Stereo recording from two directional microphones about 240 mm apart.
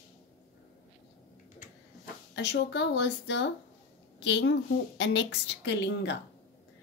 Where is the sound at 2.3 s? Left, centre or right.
Left.